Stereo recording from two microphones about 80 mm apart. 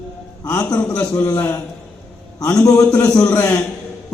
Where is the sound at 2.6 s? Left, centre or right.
Left.